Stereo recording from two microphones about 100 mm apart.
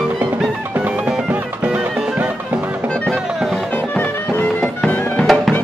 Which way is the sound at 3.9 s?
20° left (ahead or behind).